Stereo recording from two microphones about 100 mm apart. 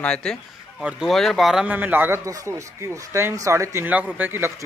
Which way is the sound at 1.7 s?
15° right (ahead or behind).